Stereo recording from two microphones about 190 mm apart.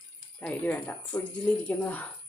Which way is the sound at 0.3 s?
10° left (ahead or behind).